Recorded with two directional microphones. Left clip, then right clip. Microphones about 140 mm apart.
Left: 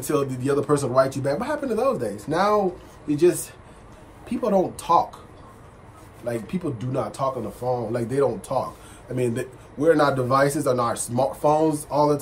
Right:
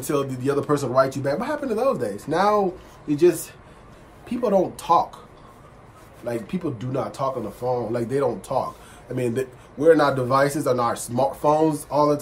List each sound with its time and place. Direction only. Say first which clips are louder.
0.0 s speech: even; 10° right (ahead or behind)
6.2 s speech: even; 10° right (ahead or behind)